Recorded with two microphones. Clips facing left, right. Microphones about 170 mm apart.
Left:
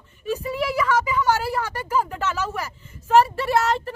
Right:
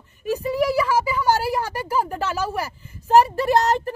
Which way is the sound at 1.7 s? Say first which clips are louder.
Right 2 dB; 10° right (ahead or behind).